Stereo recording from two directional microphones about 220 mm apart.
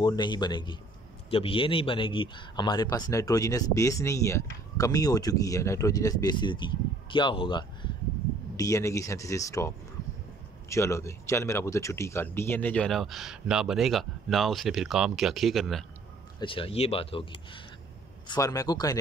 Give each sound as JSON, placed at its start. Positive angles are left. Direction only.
{"t": 0.0, "sound": "speech", "side_deg": 20}
{"t": 10.7, "sound": "speech", "side_deg": 15}
{"t": 16.3, "sound": "speech", "side_deg": 25}